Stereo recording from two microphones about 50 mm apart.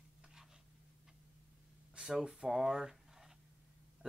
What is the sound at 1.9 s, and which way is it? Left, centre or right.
Speech, centre.